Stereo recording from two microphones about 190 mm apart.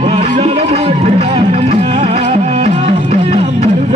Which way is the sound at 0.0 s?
30° right (ahead or behind).